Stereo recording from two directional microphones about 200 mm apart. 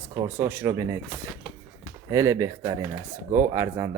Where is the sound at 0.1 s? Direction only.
10° right (ahead or behind).